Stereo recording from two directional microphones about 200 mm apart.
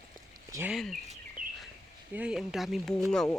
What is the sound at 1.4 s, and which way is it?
Bird, 45° right (ahead or behind).